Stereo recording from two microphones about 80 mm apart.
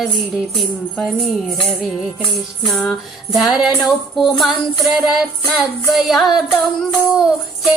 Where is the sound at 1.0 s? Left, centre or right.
Centre.